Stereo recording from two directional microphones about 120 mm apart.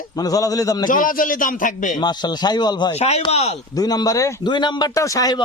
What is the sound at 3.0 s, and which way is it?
Speech, 65° left (ahead or behind).